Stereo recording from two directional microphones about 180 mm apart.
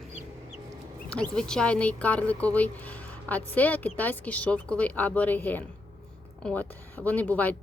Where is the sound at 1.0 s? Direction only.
5° left (ahead or behind).